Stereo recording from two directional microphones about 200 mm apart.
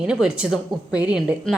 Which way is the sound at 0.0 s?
5° right (ahead or behind).